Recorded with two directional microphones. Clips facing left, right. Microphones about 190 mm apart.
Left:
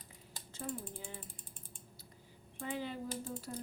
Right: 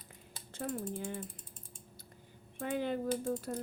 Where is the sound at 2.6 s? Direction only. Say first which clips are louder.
Right 6 dB; 55° right (ahead or behind).